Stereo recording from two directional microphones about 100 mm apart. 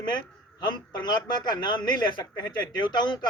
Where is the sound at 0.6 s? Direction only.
45° left (ahead or behind).